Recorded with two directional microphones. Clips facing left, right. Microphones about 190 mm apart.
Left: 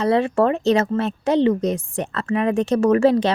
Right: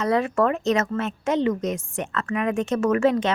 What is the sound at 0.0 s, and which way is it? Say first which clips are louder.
A woman's voice: left 3 dB; 30° left (ahead or behind).